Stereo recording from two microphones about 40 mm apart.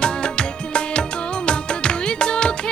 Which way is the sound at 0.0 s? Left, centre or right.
Left.